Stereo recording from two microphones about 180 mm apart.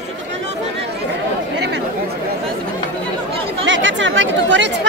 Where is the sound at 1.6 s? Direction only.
70° right (ahead or behind).